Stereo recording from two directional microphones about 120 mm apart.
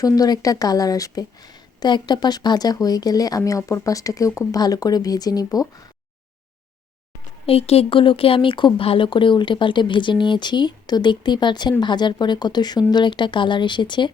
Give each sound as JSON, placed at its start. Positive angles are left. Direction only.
{"t": 0.0, "sound": "speech", "side_deg": 30}
{"t": 7.4, "sound": "speech", "side_deg": 55}